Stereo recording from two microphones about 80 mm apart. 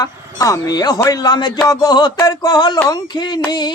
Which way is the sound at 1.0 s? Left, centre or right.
Left.